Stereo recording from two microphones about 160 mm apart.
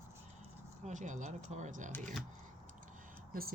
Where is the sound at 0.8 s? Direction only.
50° right (ahead or behind).